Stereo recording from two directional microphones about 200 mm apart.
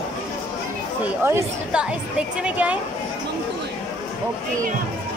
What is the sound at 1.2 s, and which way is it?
Speech, 10° right (ahead or behind).